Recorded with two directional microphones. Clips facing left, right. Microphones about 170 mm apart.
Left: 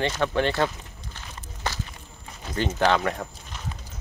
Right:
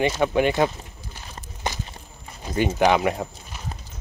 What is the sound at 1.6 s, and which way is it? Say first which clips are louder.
Walk: right 2 dB; 15° right (ahead or behind).